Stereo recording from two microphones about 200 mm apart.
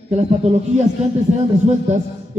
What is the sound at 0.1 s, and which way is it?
Speech, 35° right (ahead or behind).